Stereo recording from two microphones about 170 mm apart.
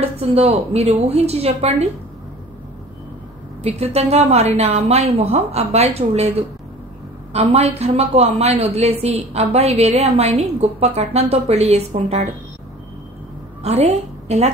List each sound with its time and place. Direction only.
0.2 s a woman's voice: 35° right (ahead or behind)
3.6 s a woman's voice: 40° right (ahead or behind)
13.6 s a woman's voice: 40° right (ahead or behind)